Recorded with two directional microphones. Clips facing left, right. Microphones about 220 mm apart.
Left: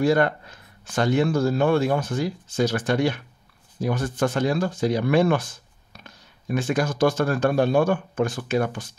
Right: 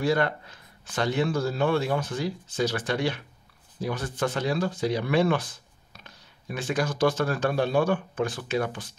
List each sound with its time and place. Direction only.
0.0 s speech: 50° left (ahead or behind)